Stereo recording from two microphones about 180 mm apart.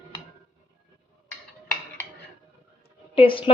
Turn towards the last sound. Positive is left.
turn(degrees=30)  # may be behind; listen again after turning